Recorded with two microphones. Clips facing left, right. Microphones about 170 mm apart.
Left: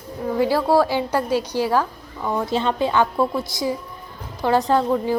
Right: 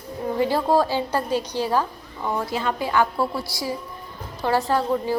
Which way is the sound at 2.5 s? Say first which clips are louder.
Left 4 dB; 25° left (ahead or behind).